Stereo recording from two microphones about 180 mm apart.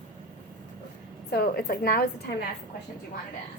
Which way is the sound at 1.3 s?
60° left (ahead or behind).